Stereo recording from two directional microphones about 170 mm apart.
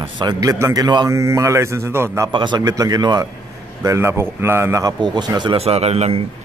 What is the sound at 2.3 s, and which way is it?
A man's voice, 25° right (ahead or behind).